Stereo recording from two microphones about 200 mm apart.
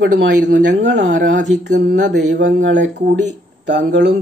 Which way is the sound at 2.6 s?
60° right (ahead or behind).